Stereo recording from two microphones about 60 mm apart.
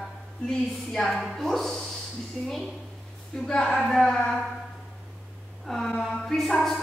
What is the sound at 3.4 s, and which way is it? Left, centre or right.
Speech, centre.